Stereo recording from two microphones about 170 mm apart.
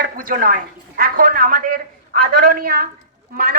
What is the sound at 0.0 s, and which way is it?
A woman's voice, 55° right (ahead or behind).